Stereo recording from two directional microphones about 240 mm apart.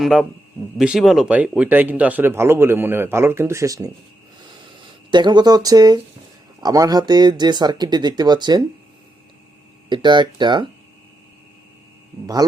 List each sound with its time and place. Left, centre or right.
0.0 s a man's voice: centre
9.9 s speech: centre
12.2 s speech: centre